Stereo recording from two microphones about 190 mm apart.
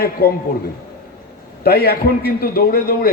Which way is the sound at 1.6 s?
55° left (ahead or behind).